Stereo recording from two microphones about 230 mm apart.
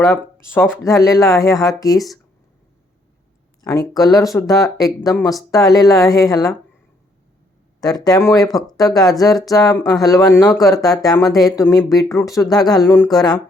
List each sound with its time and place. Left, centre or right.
0.0 s speech: centre
3.9 s speech: centre
7.8 s speech: centre